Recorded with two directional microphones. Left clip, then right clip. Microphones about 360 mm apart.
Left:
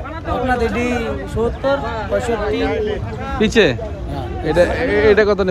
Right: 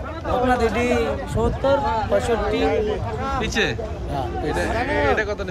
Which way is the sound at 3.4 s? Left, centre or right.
Centre.